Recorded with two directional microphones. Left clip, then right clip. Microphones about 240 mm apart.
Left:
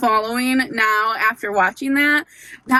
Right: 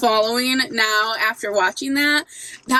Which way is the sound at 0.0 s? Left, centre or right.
Centre.